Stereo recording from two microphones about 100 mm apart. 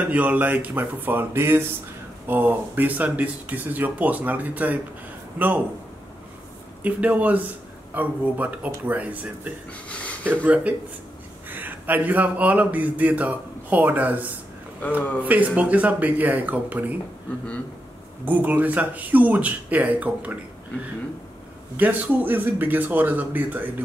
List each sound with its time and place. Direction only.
0.0 s a man's voice: 15° right (ahead or behind)
6.8 s a man's voice: 15° right (ahead or behind)
14.8 s speech: 15° left (ahead or behind)
15.2 s a man's voice: 15° right (ahead or behind)
18.2 s a man's voice: 15° right (ahead or behind)
21.7 s speech: 15° right (ahead or behind)